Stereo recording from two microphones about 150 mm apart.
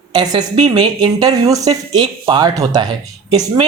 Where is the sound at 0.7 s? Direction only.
25° right (ahead or behind).